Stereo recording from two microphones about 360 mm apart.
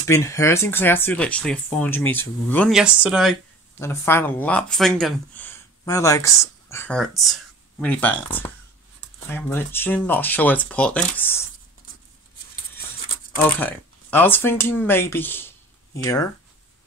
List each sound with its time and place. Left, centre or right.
0.0 s speech: centre
13.4 s speech: centre